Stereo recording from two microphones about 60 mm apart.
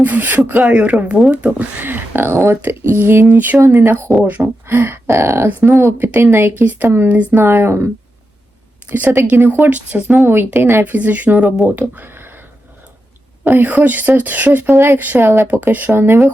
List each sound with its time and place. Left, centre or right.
0.0 s speech: right
2.2 s speech: right
4.2 s speech: right
4.6 s a sound: right
6.1 s speech: right
7.4 s a sound: right
8.9 s speech: right
9.6 s speech: right
10.2 s speech: right
13.4 s speech: right
14.7 s a sound: right
14.9 s speech: right
15.2 s speech: right